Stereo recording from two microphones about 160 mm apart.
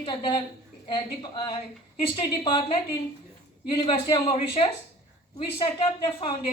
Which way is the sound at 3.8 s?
25° left (ahead or behind).